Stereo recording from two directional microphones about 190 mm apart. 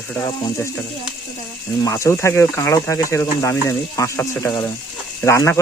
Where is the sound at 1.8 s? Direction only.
15° left (ahead or behind).